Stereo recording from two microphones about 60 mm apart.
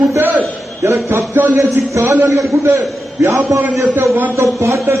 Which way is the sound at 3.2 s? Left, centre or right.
Right.